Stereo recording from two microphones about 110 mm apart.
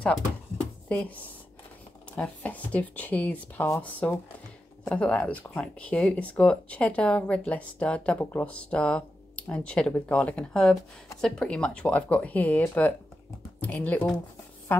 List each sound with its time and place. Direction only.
0.8 s speech: 10° left (ahead or behind)